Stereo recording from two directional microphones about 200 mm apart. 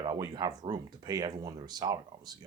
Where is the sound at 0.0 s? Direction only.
20° right (ahead or behind).